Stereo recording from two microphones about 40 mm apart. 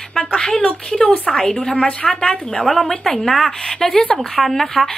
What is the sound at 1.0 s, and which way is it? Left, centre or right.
Speech, left.